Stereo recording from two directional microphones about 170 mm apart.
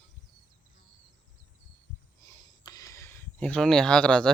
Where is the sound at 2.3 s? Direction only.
20° left (ahead or behind).